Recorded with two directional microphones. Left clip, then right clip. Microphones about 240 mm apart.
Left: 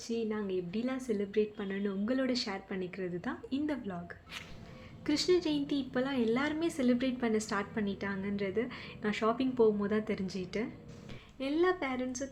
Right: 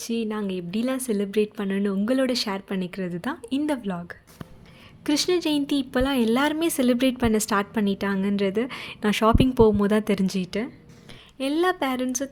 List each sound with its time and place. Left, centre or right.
0.0 s a woman's voice: right